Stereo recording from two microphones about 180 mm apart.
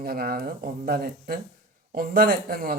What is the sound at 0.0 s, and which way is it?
Speech, 55° right (ahead or behind).